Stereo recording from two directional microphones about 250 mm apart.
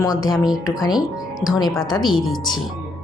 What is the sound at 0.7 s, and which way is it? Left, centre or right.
Music, centre.